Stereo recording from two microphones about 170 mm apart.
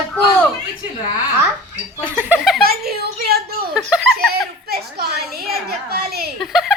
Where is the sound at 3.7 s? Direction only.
Centre (ahead or behind).